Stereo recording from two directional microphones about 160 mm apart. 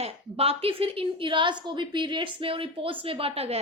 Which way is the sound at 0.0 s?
40° right (ahead or behind).